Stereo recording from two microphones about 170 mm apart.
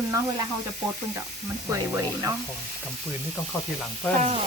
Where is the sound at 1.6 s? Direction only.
15° right (ahead or behind).